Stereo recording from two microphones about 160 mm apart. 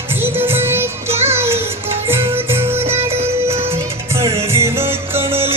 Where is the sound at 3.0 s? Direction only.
40° right (ahead or behind).